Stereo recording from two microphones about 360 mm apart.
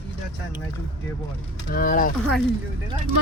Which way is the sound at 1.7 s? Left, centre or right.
Left.